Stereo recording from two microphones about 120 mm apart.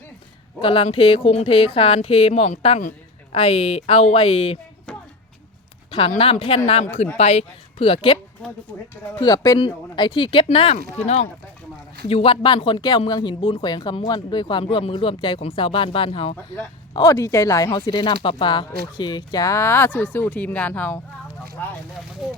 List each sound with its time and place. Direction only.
0.6 s speech: 50° left (ahead or behind); by 2.8 s 65° left (ahead or behind)
3.3 s speech: 55° left (ahead or behind)
4.9 s a sound: 5° left (ahead or behind)
6.2 s speech: 55° left (ahead or behind)
9.2 s speech: 30° left (ahead or behind)
16.9 s speech: 30° left (ahead or behind); by 21.7 s 15° left (ahead or behind)
22.2 s speech: centre (ahead or behind)